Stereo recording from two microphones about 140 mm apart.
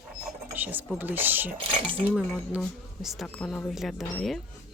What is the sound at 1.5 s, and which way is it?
Speech, 40° right (ahead or behind).